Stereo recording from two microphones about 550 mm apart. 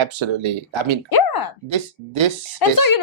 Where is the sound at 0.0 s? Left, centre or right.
Right.